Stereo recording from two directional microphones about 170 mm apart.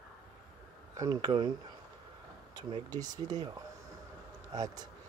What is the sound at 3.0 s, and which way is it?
Speech, 25° right (ahead or behind).